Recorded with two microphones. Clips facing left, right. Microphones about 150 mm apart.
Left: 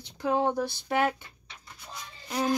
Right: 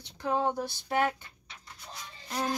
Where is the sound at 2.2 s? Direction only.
5° left (ahead or behind).